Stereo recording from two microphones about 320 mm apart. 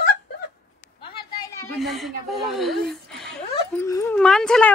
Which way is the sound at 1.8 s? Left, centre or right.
Centre.